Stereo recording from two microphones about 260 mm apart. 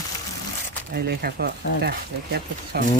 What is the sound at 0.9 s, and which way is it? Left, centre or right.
Speech, right.